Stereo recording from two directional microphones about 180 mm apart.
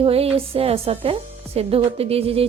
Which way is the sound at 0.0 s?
35° right (ahead or behind).